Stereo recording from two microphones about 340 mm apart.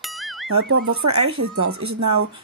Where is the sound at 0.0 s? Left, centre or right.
Centre.